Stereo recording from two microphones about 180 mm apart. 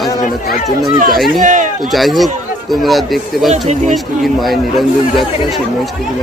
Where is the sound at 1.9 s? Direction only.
Centre (ahead or behind).